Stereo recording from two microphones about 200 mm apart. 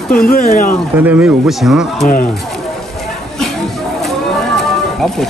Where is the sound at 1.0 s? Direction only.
10° right (ahead or behind).